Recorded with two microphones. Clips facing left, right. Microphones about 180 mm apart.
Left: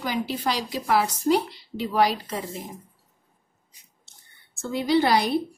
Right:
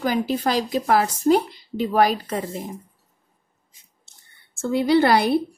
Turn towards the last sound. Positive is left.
turn(degrees=-55)  # may be behind; listen again after turning